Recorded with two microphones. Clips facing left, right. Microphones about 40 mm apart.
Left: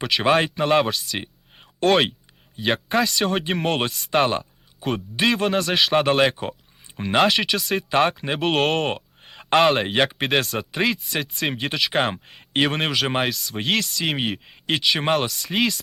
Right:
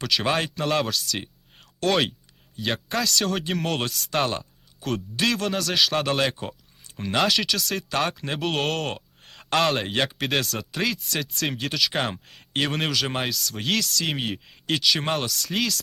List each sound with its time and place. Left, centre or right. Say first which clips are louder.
0.0 s a man's voice: left 5 dB; left
8.4 s speech: left 5 dB; centre